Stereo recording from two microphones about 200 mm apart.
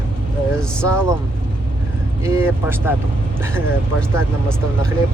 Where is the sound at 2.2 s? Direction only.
10° right (ahead or behind).